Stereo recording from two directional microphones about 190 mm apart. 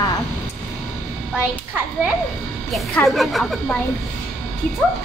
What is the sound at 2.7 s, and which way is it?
Speech, centre (ahead or behind).